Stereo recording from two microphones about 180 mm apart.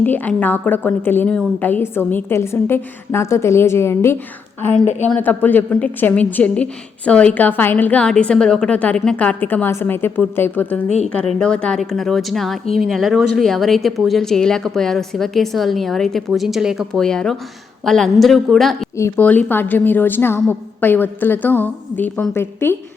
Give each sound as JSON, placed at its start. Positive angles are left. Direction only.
{"t": 0.0, "sound": "a woman's voice", "side_deg": 10}
{"t": 10.8, "sound": "speech", "side_deg": 40}
{"t": 11.1, "sound": "a woman's voice", "side_deg": 5}
{"t": 18.9, "sound": "a woman's voice", "side_deg": 15}